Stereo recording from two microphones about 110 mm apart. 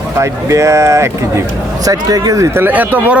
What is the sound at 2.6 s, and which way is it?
Speech, 15° right (ahead or behind).